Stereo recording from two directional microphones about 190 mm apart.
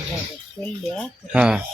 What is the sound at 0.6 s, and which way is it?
A man's voice, 5° left (ahead or behind).